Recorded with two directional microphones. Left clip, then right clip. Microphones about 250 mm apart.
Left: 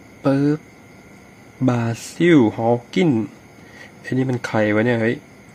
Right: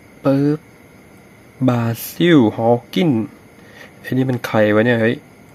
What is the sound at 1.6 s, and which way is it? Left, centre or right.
Speech, centre.